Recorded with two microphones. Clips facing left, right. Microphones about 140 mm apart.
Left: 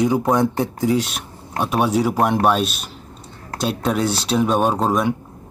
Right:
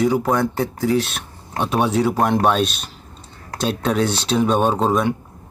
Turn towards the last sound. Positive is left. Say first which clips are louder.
# right 1 dB
turn(degrees=5)  # may be behind; listen again after turning